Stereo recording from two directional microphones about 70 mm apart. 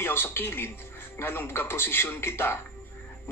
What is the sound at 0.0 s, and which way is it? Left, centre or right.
A man's voice, left.